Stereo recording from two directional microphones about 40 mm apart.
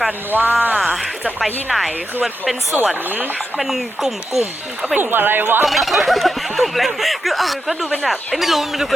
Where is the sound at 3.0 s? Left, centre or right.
Right.